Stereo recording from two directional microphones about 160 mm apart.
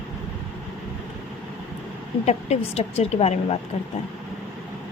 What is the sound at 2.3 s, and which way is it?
A woman's voice, 40° left (ahead or behind).